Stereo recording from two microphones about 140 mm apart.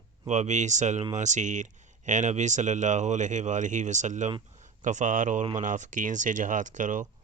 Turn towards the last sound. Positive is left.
turn(degrees=-65)  # may be behind; listen again after turning